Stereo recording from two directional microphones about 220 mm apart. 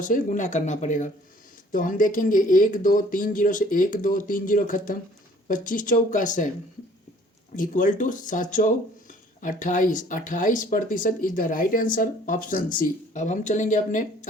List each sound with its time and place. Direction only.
0.0 s speech: 35° left (ahead or behind)
7.5 s speech: 35° left (ahead or behind)